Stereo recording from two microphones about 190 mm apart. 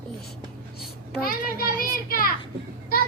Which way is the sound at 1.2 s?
50° left (ahead or behind).